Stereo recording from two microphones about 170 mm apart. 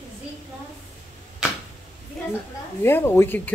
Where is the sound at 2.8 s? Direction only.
15° left (ahead or behind).